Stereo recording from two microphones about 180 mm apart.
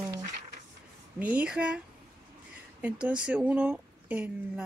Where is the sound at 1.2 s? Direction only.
10° right (ahead or behind).